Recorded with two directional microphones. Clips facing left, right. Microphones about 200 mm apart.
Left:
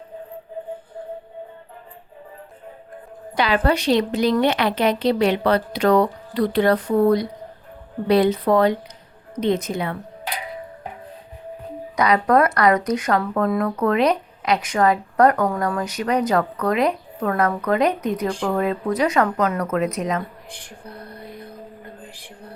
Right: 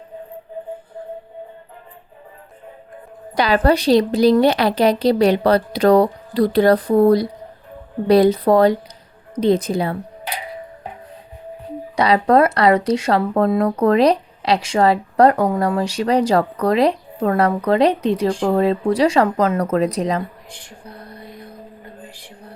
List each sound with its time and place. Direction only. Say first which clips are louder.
3.3 s a woman's voice: right 4 dB; 40° right (ahead or behind)
11.9 s speech: right 3 dB; 30° right (ahead or behind)